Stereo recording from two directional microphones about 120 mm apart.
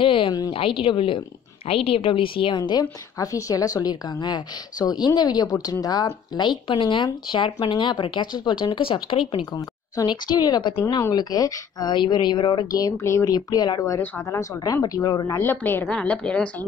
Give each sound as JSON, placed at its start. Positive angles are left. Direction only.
{"t": 0.0, "sound": "a sound", "side_deg": 45}
{"t": 0.5, "sound": "a woman's voice", "side_deg": 45}
{"t": 9.3, "sound": "a woman's voice", "side_deg": 35}
{"t": 15.3, "sound": "a woman's voice", "side_deg": 15}